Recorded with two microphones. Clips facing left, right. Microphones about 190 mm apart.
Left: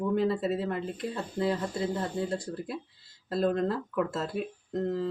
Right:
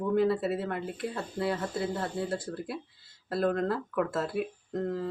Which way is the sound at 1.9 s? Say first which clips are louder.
Left 1 dB; 15° left (ahead or behind).